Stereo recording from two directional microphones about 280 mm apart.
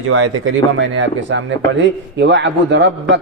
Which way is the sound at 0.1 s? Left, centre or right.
Right.